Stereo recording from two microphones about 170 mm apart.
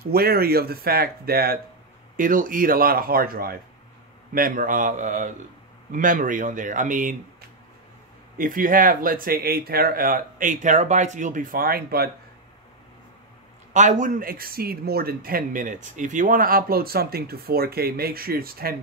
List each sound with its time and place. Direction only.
0.0 s speech: 65° right (ahead or behind)
8.4 s speech: 55° right (ahead or behind)
13.7 s speech: 45° right (ahead or behind)